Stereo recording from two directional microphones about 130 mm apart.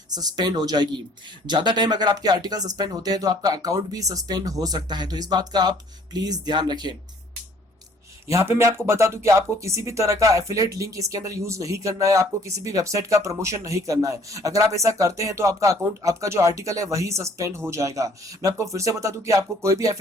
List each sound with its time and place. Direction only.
0.1 s speech: 30° right (ahead or behind)
8.3 s speech: 25° right (ahead or behind)